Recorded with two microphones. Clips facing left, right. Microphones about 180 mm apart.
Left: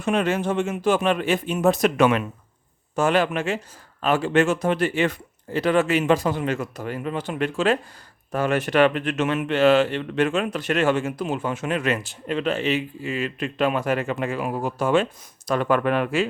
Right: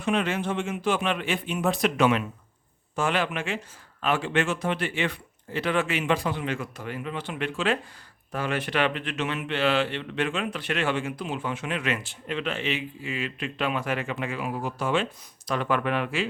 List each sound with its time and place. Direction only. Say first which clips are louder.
0.0 s a man's voice: left 4 dB; 45° left (ahead or behind)